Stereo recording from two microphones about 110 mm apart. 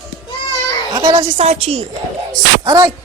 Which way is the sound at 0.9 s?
40° right (ahead or behind).